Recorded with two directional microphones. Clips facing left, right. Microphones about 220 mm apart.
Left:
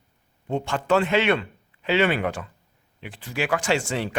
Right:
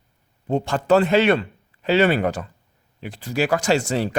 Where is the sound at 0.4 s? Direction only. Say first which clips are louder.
Right 4 dB; 35° right (ahead or behind).